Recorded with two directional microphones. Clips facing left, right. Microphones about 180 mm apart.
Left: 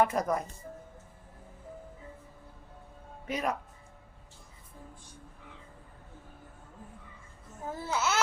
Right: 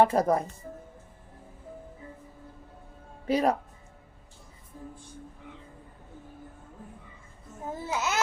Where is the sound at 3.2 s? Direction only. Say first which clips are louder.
Right 8 dB; 35° right (ahead or behind).